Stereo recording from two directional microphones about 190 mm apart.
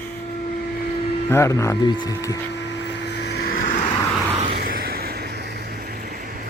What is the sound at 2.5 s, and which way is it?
Vehicle, 70° left (ahead or behind).